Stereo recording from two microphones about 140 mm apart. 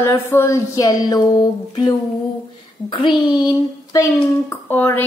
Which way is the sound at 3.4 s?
25° left (ahead or behind).